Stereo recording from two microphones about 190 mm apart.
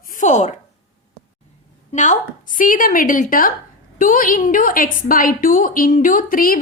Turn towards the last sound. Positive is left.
turn(degrees=50)  # may be behind; listen again after turning